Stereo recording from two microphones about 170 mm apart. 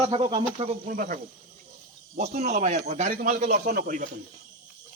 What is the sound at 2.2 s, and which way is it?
Speech, 40° right (ahead or behind).